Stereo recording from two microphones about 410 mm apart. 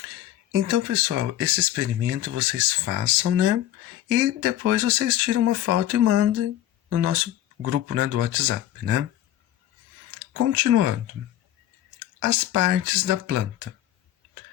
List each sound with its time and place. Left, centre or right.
0.7 s speech: right
10.5 s speech: right
12.2 s speech: right